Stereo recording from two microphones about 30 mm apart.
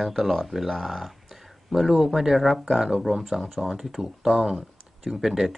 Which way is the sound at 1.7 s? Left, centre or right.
Centre.